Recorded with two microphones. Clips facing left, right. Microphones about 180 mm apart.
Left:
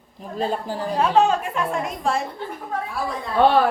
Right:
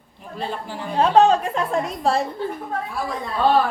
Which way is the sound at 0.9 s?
35° right (ahead or behind).